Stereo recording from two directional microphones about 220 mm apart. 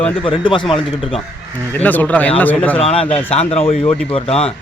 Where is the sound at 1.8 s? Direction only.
10° left (ahead or behind).